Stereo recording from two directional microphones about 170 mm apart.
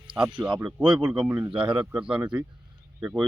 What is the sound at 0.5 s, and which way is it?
Speech, 30° right (ahead or behind).